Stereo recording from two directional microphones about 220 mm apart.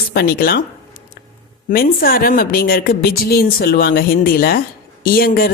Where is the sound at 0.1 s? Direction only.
45° left (ahead or behind).